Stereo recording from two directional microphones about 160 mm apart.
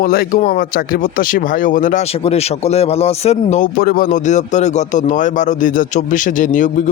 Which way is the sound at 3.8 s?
60° left (ahead or behind).